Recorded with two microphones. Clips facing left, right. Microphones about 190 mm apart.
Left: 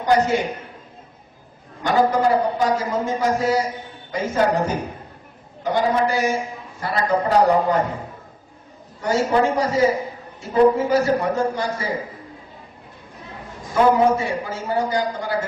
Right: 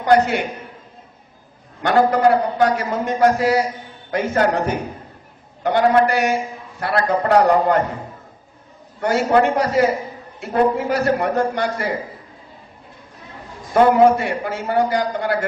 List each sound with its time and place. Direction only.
0.0 s a man's voice: 65° right (ahead or behind)
1.8 s a man's voice: 65° right (ahead or behind)
9.0 s a man's voice: 65° right (ahead or behind)
13.9 s a man's voice: 65° right (ahead or behind)